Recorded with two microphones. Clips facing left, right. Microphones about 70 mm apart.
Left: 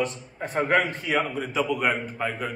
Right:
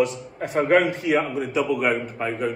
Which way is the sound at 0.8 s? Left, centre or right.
Centre.